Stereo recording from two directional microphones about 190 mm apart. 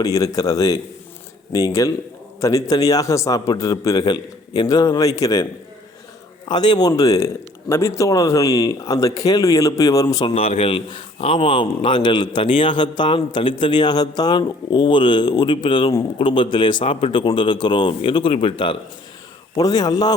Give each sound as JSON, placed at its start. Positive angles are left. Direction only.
{"t": 0.0, "sound": "speech", "side_deg": 20}
{"t": 6.5, "sound": "speech", "side_deg": 20}